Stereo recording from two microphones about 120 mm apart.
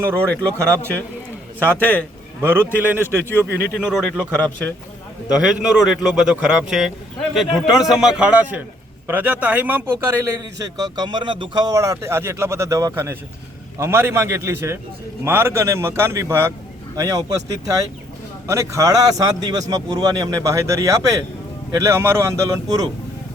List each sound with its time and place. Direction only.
0.1 s a man's voice: 10° left (ahead or behind)
1.5 s a man's voice: 15° left (ahead or behind)
2.4 s a man's voice: 15° right (ahead or behind)
3.8 s a man's voice: 5° right (ahead or behind)
5.3 s a man's voice: 5° right (ahead or behind); by 22.9 s 30° right (ahead or behind)